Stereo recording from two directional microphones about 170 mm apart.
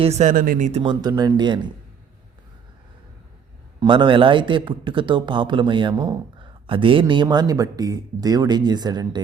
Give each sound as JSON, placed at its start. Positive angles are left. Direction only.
{"t": 0.0, "sound": "speech", "side_deg": -40}
{"t": 0.8, "sound": "a man's voice", "side_deg": -25}
{"t": 3.8, "sound": "a man's voice", "side_deg": -30}